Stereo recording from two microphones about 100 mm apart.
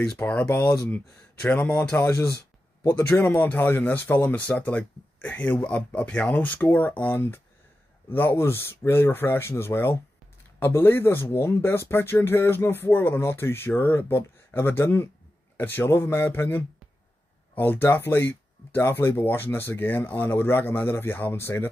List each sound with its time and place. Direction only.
0.2 s speech: 20° left (ahead or behind)
2.0 s speech: 25° left (ahead or behind)